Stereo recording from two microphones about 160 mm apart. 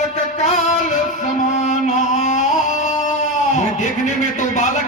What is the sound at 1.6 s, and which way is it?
Music, 45° left (ahead or behind).